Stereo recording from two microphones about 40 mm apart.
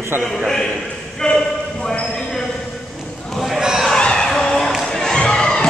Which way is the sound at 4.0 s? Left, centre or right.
Left.